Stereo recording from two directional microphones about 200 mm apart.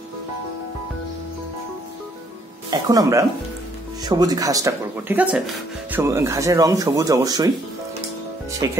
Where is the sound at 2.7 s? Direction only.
20° right (ahead or behind).